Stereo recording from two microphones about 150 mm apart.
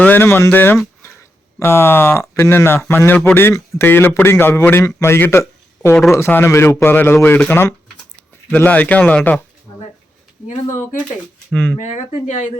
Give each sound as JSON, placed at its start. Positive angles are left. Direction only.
{"t": 0.0, "sound": "speech", "side_deg": 15}
{"t": 11.5, "sound": "speech", "side_deg": 10}
{"t": 11.8, "sound": "speech", "side_deg": 55}